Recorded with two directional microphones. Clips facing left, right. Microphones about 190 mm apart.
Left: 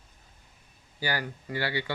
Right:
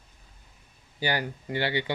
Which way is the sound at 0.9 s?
20° right (ahead or behind).